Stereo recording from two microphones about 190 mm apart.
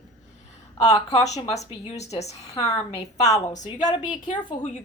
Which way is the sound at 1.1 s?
35° left (ahead or behind).